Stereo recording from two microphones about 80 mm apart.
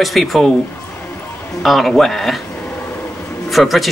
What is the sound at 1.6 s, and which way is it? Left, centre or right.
Speech, centre.